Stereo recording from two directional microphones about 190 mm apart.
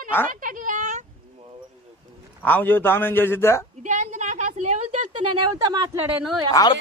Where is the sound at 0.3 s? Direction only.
45° right (ahead or behind).